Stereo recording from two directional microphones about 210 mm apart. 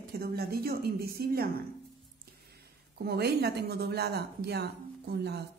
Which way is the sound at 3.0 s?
50° right (ahead or behind).